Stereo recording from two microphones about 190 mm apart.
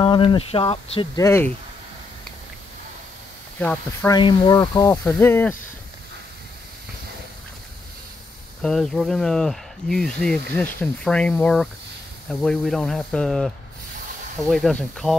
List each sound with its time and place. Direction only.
0.0 s speech: 25° left (ahead or behind)
1.1 s speech: 15° left (ahead or behind)
3.5 s speech: 10° left (ahead or behind)
4.2 s speech: 20° left (ahead or behind)
8.6 s speech: centre (ahead or behind)